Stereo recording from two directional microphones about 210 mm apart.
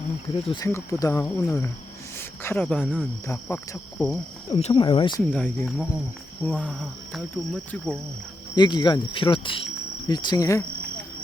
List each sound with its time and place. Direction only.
0.4 s speech: 20° left (ahead or behind)
4.1 s speech: 15° left (ahead or behind)
5.3 s cricket: 5° left (ahead or behind)
8.5 s speech: 20° left (ahead or behind)